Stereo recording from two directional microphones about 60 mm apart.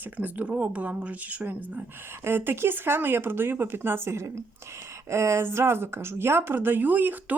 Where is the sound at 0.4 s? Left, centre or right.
Right.